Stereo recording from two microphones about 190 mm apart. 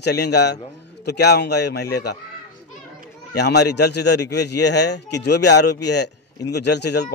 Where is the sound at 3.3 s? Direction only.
60° left (ahead or behind).